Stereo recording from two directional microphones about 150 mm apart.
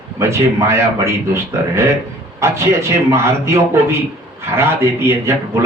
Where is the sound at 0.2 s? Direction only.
15° right (ahead or behind).